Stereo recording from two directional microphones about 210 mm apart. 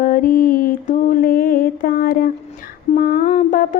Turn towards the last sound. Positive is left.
turn(degrees=40)  # may be behind; listen again after turning